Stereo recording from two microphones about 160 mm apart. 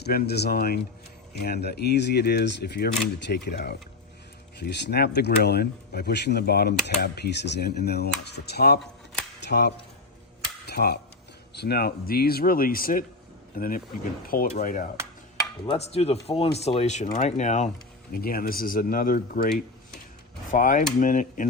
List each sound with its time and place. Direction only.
0.3 s speech: 90° left; by 0.8 s 75° left (ahead or behind)
1.4 s speech: 90° left
6.8 s speech: 90° left; by 14.8 s 55° left (ahead or behind)
15.4 s speech: 30° left (ahead or behind); by 17.7 s 45° left (ahead or behind)
18.1 s speech: 70° left (ahead or behind)